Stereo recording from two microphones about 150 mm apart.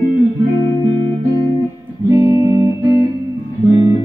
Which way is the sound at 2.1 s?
25° right (ahead or behind).